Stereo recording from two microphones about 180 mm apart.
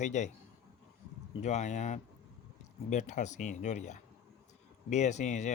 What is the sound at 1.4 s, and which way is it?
Speech, 40° left (ahead or behind).